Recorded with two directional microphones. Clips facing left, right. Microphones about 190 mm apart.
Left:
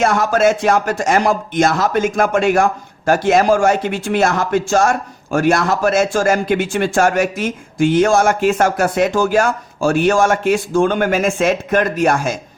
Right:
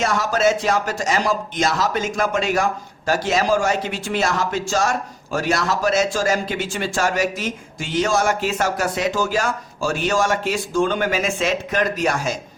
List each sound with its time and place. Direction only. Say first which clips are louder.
0.0 s speech: left 5 dB; 55° left (ahead or behind)